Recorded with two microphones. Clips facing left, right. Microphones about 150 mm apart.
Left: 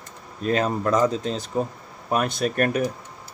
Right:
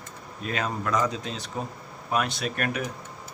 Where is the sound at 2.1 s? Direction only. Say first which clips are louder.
Left 4 dB; 45° left (ahead or behind).